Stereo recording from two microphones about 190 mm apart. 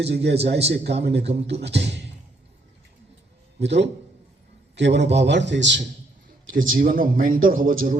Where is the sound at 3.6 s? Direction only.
65° right (ahead or behind).